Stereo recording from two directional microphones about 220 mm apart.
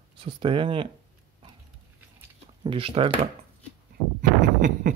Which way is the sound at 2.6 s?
25° right (ahead or behind).